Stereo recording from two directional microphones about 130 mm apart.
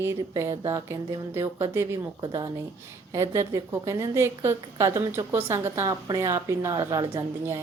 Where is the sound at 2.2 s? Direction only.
30° right (ahead or behind).